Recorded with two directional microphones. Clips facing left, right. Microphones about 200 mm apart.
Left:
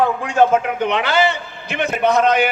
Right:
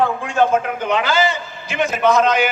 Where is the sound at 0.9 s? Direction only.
65° left (ahead or behind).